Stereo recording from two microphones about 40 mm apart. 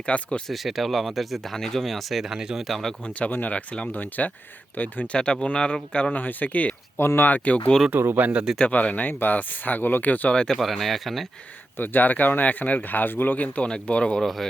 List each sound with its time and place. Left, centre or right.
0.0 s speech: left
0.4 s speech: centre
2.6 s speech: centre
3.1 s speech: left
3.9 s speech: left
5.1 s speech: left
6.1 s speech: left
7.9 s speech: right
8.7 s speech: left
10.5 s speech: centre
11.8 s speech: left
13.3 s speech: left
13.7 s speech: left
14.2 s speech: centre